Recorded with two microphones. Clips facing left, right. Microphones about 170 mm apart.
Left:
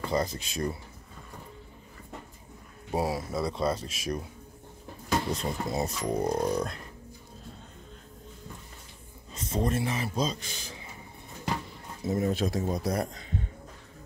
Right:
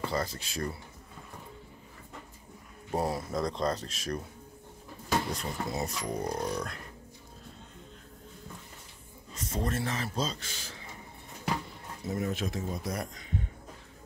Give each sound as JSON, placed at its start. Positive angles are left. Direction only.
{"t": 0.0, "sound": "speech", "side_deg": 20}
{"t": 2.9, "sound": "speech", "side_deg": 10}
{"t": 5.3, "sound": "speech", "side_deg": 25}
{"t": 9.3, "sound": "speech", "side_deg": 20}
{"t": 12.1, "sound": "speech", "side_deg": 30}